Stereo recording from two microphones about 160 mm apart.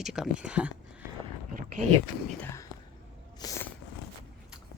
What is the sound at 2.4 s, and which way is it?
Speech, 15° left (ahead or behind).